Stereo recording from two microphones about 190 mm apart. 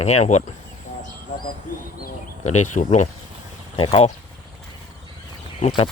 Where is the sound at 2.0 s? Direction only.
40° left (ahead or behind).